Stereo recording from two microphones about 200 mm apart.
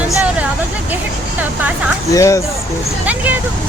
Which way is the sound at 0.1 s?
5° right (ahead or behind).